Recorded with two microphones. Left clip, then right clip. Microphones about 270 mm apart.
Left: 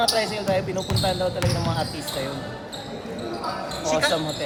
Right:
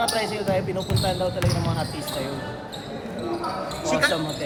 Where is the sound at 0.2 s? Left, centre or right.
Left.